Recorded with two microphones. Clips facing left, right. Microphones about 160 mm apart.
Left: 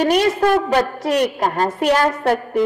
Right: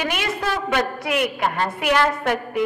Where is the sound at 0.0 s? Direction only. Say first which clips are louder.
Left 9 dB; 40° left (ahead or behind).